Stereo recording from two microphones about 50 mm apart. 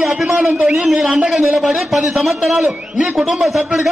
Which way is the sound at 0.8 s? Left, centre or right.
Centre.